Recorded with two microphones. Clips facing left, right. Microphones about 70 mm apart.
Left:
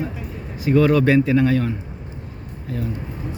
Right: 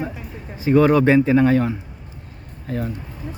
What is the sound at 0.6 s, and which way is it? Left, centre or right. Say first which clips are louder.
A man's voice: right 1 dB; right.